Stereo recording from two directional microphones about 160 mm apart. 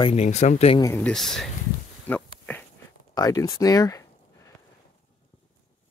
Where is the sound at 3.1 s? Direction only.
20° left (ahead or behind).